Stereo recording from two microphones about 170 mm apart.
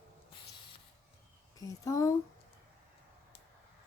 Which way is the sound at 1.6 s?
20° left (ahead or behind).